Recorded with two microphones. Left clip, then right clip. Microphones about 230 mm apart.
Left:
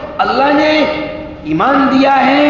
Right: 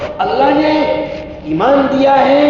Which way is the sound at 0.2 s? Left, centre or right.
Left.